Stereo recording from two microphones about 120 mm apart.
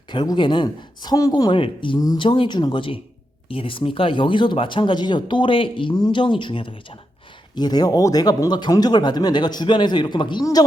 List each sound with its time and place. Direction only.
0.1 s a woman's voice: 40° left (ahead or behind)